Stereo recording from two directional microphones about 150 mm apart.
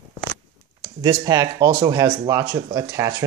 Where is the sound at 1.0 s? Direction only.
25° right (ahead or behind).